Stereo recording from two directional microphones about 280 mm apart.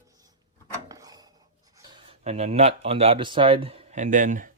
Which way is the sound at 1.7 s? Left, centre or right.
Centre.